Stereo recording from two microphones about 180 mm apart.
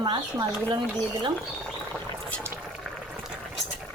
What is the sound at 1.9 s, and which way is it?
Rodents, 5° left (ahead or behind).